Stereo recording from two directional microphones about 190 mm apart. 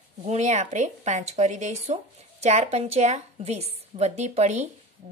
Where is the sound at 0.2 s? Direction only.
35° right (ahead or behind).